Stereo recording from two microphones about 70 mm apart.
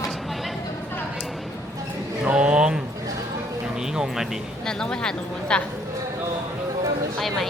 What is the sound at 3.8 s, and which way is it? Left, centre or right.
Music, centre.